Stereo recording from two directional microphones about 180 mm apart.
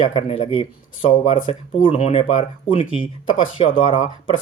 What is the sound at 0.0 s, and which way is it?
Speech, 30° left (ahead or behind).